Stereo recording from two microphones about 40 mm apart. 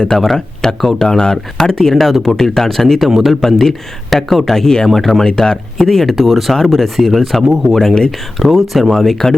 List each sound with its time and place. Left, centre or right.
0.1 s speech: centre
1.0 s speech: centre
1.9 s speech: centre
7.8 s speech: centre
8.4 s speech: centre